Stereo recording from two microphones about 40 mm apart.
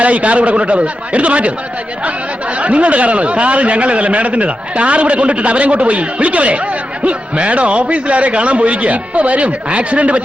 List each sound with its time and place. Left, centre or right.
0.0 s speech: right